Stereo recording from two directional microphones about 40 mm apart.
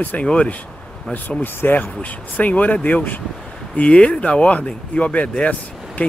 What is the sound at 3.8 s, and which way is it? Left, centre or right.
Speech, left.